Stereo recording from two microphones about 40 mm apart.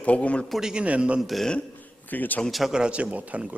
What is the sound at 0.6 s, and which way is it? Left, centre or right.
Speech, centre.